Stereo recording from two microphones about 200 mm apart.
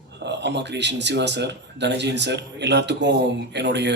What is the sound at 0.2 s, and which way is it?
Speech, 60° right (ahead or behind).